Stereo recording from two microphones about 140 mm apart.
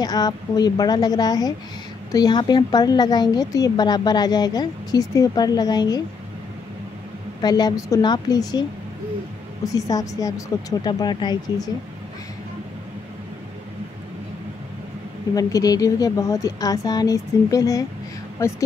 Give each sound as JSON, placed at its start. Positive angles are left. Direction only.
{"t": 0.0, "sound": "a woman's voice", "side_deg": 30}
{"t": 7.4, "sound": "a woman's voice", "side_deg": 30}
{"t": 9.7, "sound": "a woman's voice", "side_deg": 25}
{"t": 15.3, "sound": "a woman's voice", "side_deg": 25}